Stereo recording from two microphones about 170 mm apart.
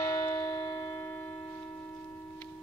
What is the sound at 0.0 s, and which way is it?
Church bell, 20° left (ahead or behind).